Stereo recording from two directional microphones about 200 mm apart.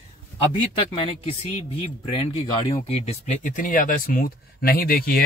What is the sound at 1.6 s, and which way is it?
Speech, 30° left (ahead or behind).